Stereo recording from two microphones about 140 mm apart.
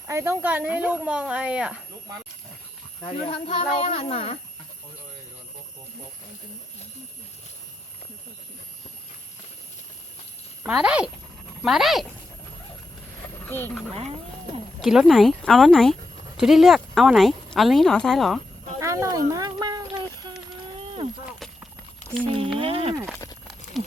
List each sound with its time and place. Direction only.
0.1 s speech: 20° right (ahead or behind)
3.2 s speech: 40° left (ahead or behind)
10.7 s speech: 5° right (ahead or behind)
13.4 s a sound: 15° left (ahead or behind)
14.8 s speech: centre (ahead or behind)
18.8 s clip-clop: 20° right (ahead or behind)
20.7 s a sound: 40° right (ahead or behind)
21.3 s clip-clop: centre (ahead or behind)
22.3 s speech: 40° right (ahead or behind)
23.8 s a sound: centre (ahead or behind)